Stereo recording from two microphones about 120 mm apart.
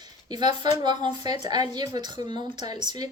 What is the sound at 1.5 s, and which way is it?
A woman's voice, 35° right (ahead or behind).